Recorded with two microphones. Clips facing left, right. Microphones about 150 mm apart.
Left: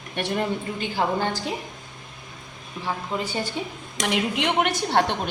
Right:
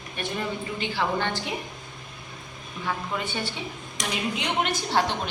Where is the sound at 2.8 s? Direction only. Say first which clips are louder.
Left 2 dB; 35° left (ahead or behind).